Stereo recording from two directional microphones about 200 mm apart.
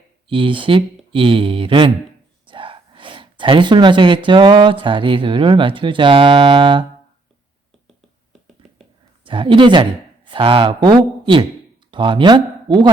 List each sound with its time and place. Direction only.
0.3 s speech: 25° right (ahead or behind)
8.6 s whispering: centre (ahead or behind)
9.2 s speech: 25° right (ahead or behind)